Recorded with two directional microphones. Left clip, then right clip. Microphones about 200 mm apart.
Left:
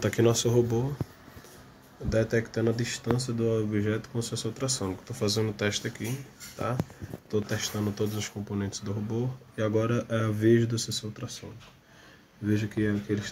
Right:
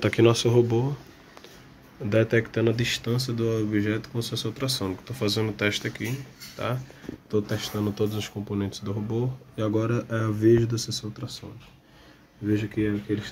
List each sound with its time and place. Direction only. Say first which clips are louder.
0.0 s speech: right 4 dB; 10° right (ahead or behind)
2.0 s speech: right 4 dB; 15° right (ahead or behind)
3.2 s speech: right 1 dB; centre (ahead or behind)
9.8 s speech: right 1 dB; centre (ahead or behind)
12.4 s speech: right 3 dB; centre (ahead or behind)